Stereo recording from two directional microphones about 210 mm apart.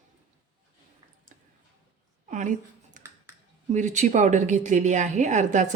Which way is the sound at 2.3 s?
35° right (ahead or behind).